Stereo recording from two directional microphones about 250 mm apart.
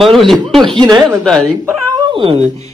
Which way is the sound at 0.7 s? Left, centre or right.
Centre.